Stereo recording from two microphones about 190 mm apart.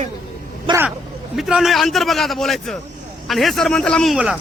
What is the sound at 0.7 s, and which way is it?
Speech, 25° right (ahead or behind).